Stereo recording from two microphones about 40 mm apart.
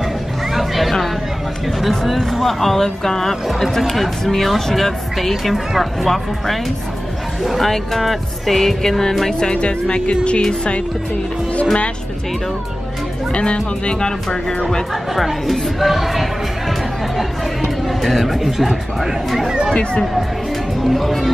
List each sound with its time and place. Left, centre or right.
0.5 s a sound: centre
1.8 s speech: centre
3.4 s speech: centre
9.3 s speech: left
13.3 s speech: left
15.1 s speech: centre
17.8 s speech: centre
19.7 s speech: left
20.8 s speech: centre